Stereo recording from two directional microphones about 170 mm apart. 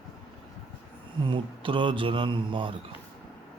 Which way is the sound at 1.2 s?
30° right (ahead or behind).